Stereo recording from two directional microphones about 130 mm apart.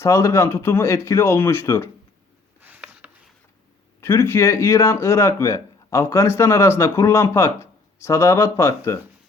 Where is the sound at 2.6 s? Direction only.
10° right (ahead or behind).